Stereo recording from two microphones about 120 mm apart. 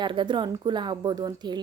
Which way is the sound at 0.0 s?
40° right (ahead or behind).